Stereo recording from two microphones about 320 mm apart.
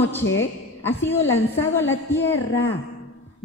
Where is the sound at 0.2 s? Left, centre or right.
Left.